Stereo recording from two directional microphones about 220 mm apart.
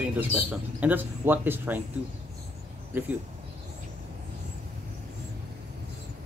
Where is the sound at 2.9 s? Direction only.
10° right (ahead or behind).